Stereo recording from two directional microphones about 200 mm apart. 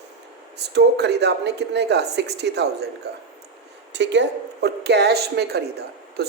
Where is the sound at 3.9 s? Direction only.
60° right (ahead or behind).